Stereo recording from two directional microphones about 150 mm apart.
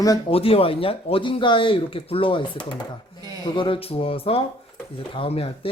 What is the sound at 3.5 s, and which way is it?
A man's voice, 35° left (ahead or behind).